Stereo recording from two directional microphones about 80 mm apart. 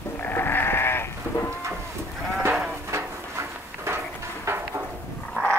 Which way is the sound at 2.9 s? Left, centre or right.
Right.